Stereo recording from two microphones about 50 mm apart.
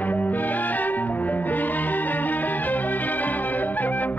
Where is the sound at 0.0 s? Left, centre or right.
Left.